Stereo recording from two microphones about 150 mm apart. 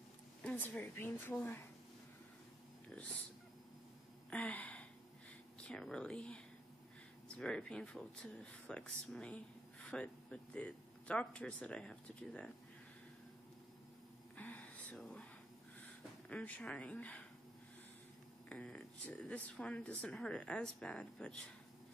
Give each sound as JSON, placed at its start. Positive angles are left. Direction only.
{"t": 0.4, "sound": "speech", "side_deg": 10}
{"t": 4.3, "sound": "a sound", "side_deg": 5}
{"t": 5.7, "sound": "speech", "side_deg": 5}
{"t": 14.3, "sound": "a sound", "side_deg": 10}
{"t": 16.3, "sound": "speech", "side_deg": 10}
{"t": 18.5, "sound": "speech", "side_deg": 5}